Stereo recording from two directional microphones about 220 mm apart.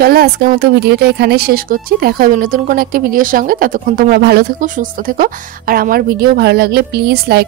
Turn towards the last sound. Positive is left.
turn(degrees=-45)  # may be behind; listen again after turning